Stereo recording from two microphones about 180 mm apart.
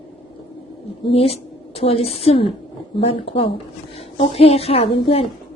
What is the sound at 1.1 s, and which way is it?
A woman's voice, 35° left (ahead or behind).